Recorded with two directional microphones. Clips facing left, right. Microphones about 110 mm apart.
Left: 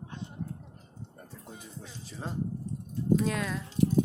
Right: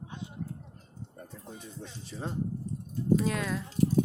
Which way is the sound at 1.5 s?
Centre (ahead or behind).